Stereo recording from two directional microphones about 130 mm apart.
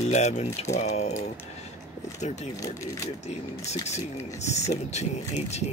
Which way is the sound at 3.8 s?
60° left (ahead or behind).